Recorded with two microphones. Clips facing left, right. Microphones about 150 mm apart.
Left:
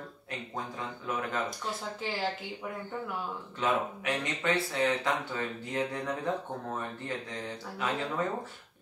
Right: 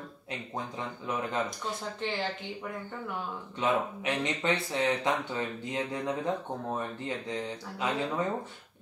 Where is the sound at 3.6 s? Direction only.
20° right (ahead or behind).